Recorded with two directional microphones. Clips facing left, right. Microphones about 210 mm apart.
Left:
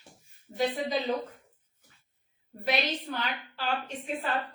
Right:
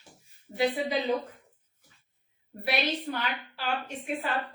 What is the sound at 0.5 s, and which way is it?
Speech, 10° right (ahead or behind).